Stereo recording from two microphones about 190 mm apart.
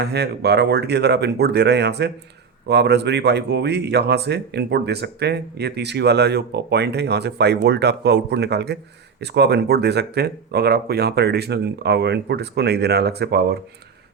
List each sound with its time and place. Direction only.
0.0 s speech: 60° right (ahead or behind)